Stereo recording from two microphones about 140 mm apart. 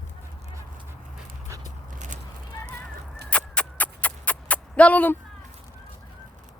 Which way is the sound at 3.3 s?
10° left (ahead or behind).